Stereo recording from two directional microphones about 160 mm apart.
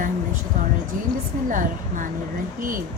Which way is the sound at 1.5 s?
55° right (ahead or behind).